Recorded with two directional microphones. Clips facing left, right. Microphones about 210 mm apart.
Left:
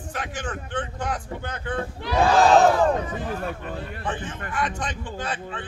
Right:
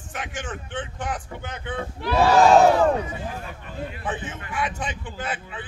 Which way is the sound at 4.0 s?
5° right (ahead or behind).